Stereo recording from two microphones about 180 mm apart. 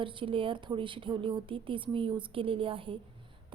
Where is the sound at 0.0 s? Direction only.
30° right (ahead or behind).